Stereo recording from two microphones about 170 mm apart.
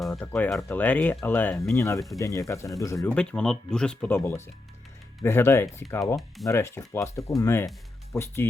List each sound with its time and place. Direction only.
0.2 s speech: 10° left (ahead or behind)
3.2 s speech: 5° left (ahead or behind)
6.1 s speech: centre (ahead or behind)
6.5 s speech: 15° left (ahead or behind)